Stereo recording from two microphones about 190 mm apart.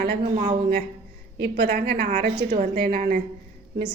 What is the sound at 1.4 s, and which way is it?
Speech, 60° right (ahead or behind).